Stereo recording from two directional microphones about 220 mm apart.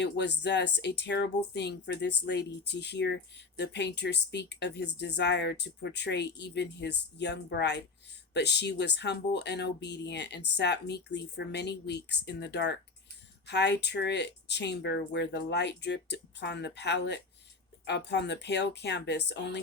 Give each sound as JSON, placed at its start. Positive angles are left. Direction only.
{"t": 0.0, "sound": "speech", "side_deg": 50}